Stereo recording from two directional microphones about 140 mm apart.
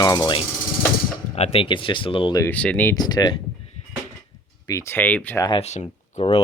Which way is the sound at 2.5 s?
10° left (ahead or behind).